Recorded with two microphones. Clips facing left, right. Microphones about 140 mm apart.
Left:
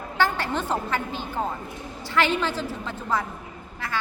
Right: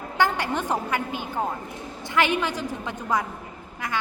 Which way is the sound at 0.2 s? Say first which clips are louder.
Right 1 dB; 15° right (ahead or behind).